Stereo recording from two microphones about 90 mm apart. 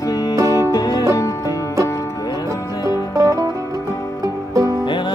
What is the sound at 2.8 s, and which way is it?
Music, 40° right (ahead or behind).